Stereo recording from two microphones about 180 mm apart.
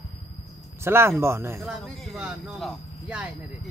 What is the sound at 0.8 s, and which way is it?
Speech, 15° right (ahead or behind).